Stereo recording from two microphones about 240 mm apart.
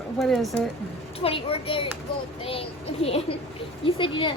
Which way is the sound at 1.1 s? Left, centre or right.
Left.